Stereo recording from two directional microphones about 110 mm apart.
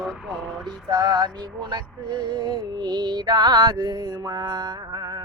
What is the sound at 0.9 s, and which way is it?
Music, 35° right (ahead or behind).